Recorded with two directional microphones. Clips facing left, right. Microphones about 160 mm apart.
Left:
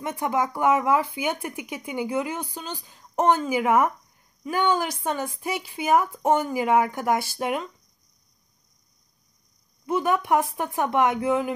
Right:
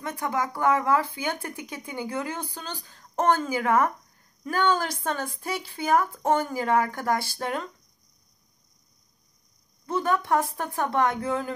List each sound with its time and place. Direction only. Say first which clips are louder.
0.0 s speech: left 3 dB; 20° left (ahead or behind)
9.8 s speech: left 2 dB; 15° left (ahead or behind)